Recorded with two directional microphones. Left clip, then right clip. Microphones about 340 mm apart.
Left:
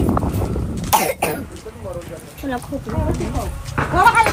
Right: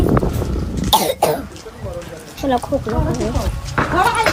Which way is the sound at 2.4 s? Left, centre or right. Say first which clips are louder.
Right 8 dB; centre.